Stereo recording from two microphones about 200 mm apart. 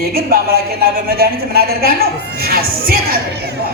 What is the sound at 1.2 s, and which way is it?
A man's voice, 50° right (ahead or behind).